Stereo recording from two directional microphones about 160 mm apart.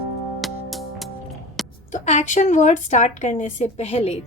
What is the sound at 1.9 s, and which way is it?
A woman's voice, 45° left (ahead or behind).